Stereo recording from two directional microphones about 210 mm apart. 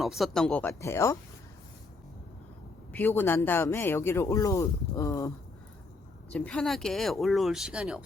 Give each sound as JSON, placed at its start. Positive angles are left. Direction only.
{"t": 0.0, "sound": "a man's voice", "side_deg": 0}
{"t": 2.9, "sound": "a man's voice", "side_deg": 10}
{"t": 6.3, "sound": "speech", "side_deg": 5}